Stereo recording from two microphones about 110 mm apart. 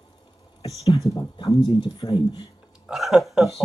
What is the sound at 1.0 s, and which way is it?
Speech, 30° left (ahead or behind).